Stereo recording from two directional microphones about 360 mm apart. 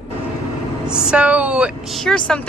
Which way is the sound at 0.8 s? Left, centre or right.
Centre.